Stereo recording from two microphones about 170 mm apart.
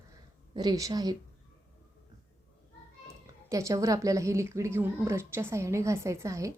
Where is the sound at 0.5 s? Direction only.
25° right (ahead or behind).